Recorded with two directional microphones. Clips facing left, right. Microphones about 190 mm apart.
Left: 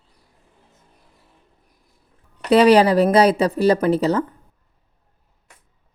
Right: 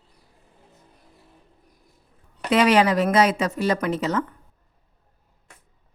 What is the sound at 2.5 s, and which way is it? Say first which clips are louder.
Speech: left 5 dB; 35° left (ahead or behind).